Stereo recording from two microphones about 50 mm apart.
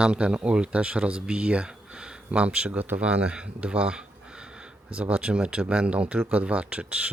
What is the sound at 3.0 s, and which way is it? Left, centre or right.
Speech, right.